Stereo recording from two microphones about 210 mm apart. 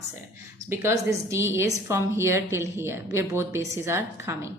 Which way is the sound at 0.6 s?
10° right (ahead or behind).